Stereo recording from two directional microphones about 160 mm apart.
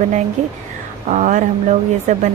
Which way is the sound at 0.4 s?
45° right (ahead or behind).